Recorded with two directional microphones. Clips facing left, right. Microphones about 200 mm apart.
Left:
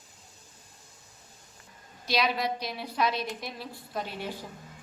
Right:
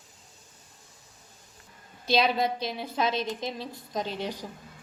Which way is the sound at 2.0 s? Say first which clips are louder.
Right 4 dB; 25° right (ahead or behind).